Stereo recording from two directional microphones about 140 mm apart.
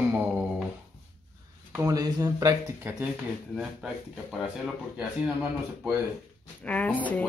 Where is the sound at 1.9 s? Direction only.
25° right (ahead or behind).